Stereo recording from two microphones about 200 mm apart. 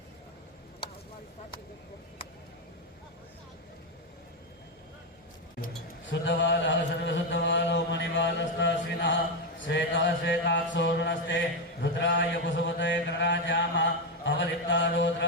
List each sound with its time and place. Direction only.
6.1 s mantra: 65° left (ahead or behind)